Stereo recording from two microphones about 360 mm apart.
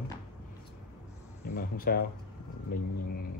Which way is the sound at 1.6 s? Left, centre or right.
Left.